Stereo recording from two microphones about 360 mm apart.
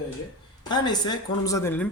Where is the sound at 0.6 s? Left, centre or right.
Centre.